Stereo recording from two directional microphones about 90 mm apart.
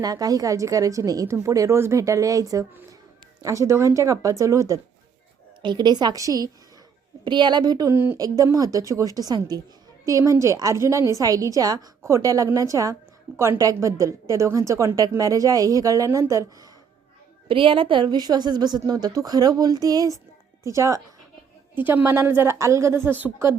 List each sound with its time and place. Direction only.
0.0 s speech: 45° right (ahead or behind)
5.6 s a woman's voice: 55° right (ahead or behind); by 6.5 s 40° right (ahead or behind)
7.3 s a woman's voice: 60° right (ahead or behind)
7.9 s speech: 30° right (ahead or behind)
8.5 s a woman's voice: 40° right (ahead or behind)
17.5 s a woman's voice: 75° right (ahead or behind); by 21.0 s 35° right (ahead or behind)
21.8 s speech: 20° right (ahead or behind)
22.0 s speech: 30° right (ahead or behind)